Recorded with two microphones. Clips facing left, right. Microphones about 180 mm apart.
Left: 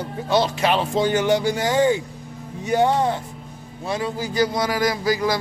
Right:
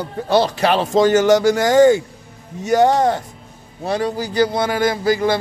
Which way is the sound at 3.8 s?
35° right (ahead or behind).